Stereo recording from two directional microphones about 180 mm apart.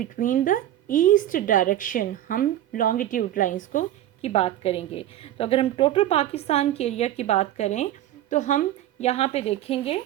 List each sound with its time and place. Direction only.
0.0 s a woman's voice: 50° left (ahead or behind); by 10.0 s 30° left (ahead or behind)